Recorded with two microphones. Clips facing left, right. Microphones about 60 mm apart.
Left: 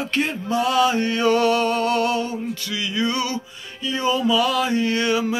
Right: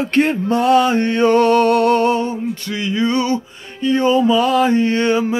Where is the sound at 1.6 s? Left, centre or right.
Right.